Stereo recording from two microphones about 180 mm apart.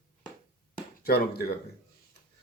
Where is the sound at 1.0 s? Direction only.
60° left (ahead or behind).